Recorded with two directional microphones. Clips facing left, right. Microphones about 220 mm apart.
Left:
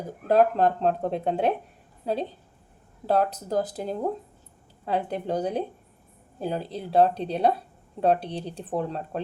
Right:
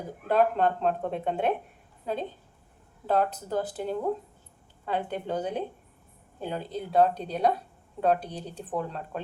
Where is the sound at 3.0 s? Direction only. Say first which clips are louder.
Left 2 dB; 40° left (ahead or behind).